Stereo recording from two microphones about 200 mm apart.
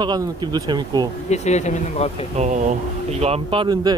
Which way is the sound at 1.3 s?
35° left (ahead or behind).